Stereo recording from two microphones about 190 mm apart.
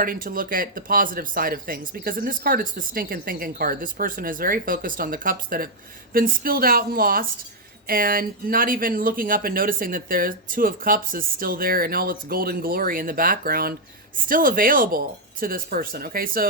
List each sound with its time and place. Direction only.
0.0 s speech: 50° right (ahead or behind)